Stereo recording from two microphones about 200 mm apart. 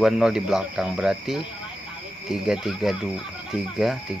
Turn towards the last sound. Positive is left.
turn(degrees=0)  # may be behind; listen again after turning